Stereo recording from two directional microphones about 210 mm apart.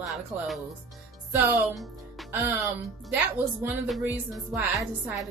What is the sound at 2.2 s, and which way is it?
Speech, 15° right (ahead or behind).